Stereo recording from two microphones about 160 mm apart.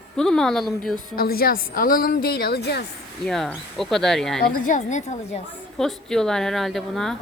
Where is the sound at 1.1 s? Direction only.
70° left (ahead or behind); by 2.8 s 90° left.